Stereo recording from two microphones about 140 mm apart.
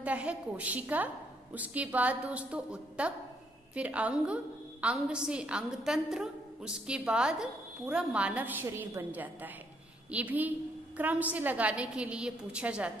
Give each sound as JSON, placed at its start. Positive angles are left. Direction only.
{"t": 0.0, "sound": "a woman's voice", "side_deg": -10}